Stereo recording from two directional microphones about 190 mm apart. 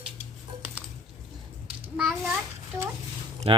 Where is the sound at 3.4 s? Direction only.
30° right (ahead or behind).